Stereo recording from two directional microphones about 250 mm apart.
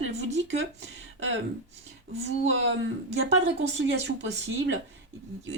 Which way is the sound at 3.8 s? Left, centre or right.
Right.